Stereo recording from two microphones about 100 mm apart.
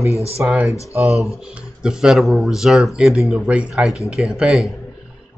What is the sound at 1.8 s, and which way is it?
Speech, 5° right (ahead or behind).